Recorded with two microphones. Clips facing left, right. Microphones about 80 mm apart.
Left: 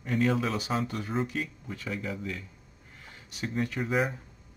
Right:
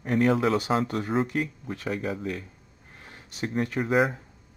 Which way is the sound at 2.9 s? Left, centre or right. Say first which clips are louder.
Right 2 dB; right.